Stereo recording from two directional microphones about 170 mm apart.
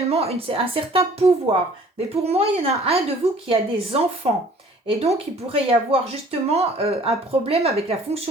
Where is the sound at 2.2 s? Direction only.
35° right (ahead or behind).